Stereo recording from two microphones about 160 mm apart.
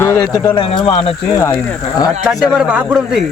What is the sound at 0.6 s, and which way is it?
Speech, 30° left (ahead or behind).